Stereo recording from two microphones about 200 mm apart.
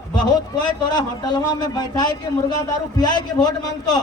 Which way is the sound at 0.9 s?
20° left (ahead or behind).